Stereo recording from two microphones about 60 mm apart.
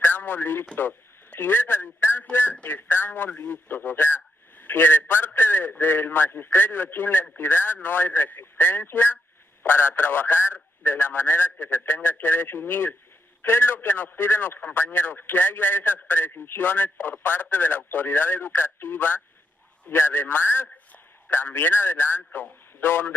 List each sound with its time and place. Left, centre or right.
0.0 s radio: left
0.7 s a man's voice: left